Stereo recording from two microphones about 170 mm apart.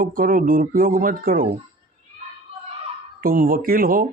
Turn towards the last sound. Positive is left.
turn(degrees=-55)  # may be behind; listen again after turning